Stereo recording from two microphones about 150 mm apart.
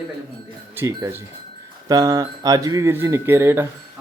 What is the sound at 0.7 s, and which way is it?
Speech, 15° right (ahead or behind).